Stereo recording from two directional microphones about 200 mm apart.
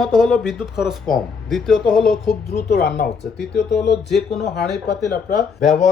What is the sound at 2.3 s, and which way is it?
Speech, 50° left (ahead or behind).